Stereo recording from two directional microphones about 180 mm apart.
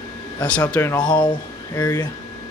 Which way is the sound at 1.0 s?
25° left (ahead or behind).